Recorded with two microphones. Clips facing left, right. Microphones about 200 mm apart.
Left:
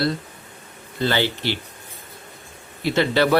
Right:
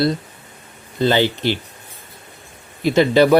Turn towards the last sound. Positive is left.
turn(degrees=-15)  # may be behind; listen again after turning